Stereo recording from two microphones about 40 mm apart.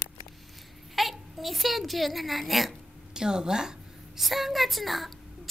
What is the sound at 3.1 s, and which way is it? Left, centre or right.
Speech, centre.